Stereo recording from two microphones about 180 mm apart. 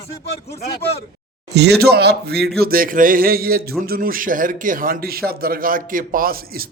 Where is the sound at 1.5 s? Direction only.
65° right (ahead or behind).